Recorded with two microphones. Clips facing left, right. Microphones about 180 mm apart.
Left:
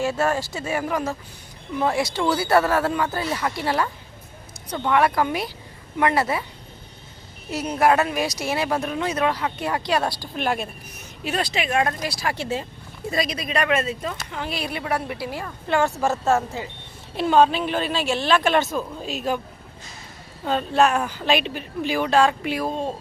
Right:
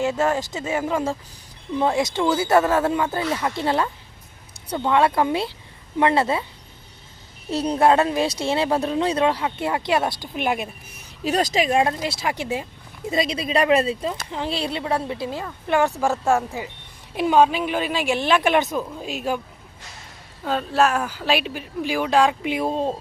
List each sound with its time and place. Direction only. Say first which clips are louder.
0.0 s speech: right 1 dB; 20° right (ahead or behind)
4.9 s speech: right 1 dB; 25° right (ahead or behind)
7.5 s speech: right 2 dB; 30° right (ahead or behind); by 10.7 s 15° right (ahead or behind)
10.9 s speech: right 4 dB; 35° right (ahead or behind); by 12.6 s 15° right (ahead or behind)
13.1 s speech: right 3 dB; 25° right (ahead or behind)
20.4 s speech: left 1 dB; centre (ahead or behind); by 22.7 s 20° right (ahead or behind)
22.7 s speech: right 3 dB; 30° right (ahead or behind)